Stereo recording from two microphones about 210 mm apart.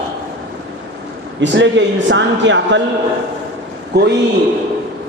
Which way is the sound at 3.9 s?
50° right (ahead or behind).